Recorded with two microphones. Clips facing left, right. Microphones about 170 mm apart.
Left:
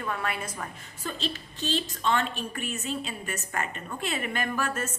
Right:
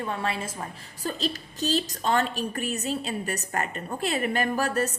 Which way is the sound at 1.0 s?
40° right (ahead or behind).